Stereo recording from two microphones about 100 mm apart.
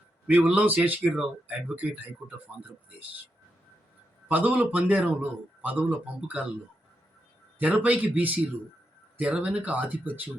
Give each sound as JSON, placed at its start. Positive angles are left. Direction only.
{"t": 0.3, "sound": "a man's voice", "side_deg": -15}
{"t": 4.3, "sound": "a man's voice", "side_deg": -15}
{"t": 7.6, "sound": "a man's voice", "side_deg": -15}